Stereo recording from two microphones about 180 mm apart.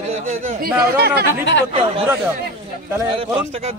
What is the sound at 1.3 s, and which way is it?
Speech, 75° left (ahead or behind).